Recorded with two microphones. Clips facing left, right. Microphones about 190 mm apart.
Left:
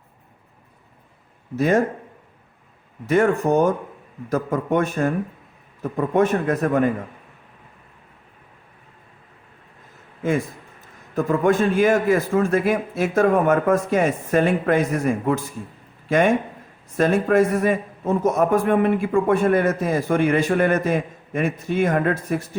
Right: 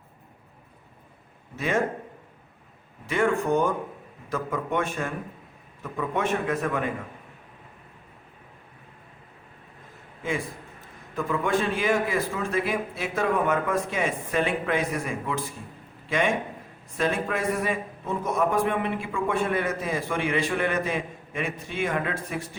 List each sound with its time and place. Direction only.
1.5 s a man's voice: 40° left (ahead or behind)
3.1 s a man's voice: 40° left (ahead or behind)
11.1 s a man's voice: 45° left (ahead or behind)